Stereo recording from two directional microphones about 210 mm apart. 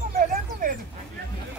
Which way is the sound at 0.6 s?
40° right (ahead or behind).